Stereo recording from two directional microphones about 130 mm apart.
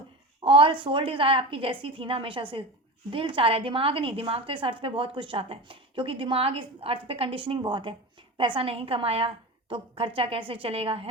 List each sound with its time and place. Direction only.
0.4 s a woman's voice: 45° right (ahead or behind)